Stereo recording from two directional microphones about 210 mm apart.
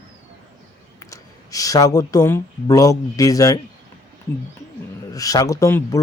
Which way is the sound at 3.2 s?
15° left (ahead or behind).